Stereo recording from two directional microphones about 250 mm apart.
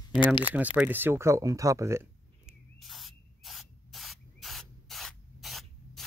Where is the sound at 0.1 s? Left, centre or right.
Centre.